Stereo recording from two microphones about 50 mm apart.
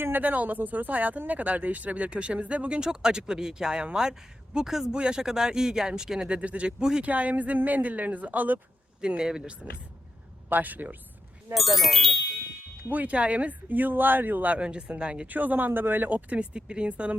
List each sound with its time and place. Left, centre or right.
0.2 s speech: right; by 7.0 s centre
7.0 s speech: right
9.0 s speech: centre
10.5 s speech: right
11.5 s speech: centre
12.9 s speech: right
15.3 s speech: right